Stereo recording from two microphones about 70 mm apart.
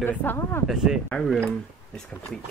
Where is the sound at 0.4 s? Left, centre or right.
Left.